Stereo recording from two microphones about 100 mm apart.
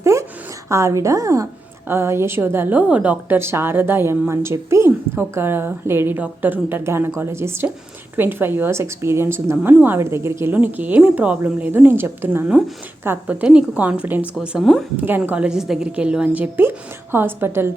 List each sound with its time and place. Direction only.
0.0 s a woman's voice: 30° right (ahead or behind)